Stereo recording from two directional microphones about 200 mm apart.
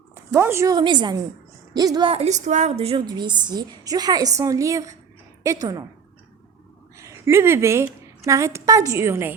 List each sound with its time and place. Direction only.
0.1 s a woman's voice: 10° right (ahead or behind)
6.9 s a woman's voice: 15° right (ahead or behind)